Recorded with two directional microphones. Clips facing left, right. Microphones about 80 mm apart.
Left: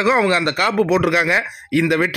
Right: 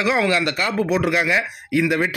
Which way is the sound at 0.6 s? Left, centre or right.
Left.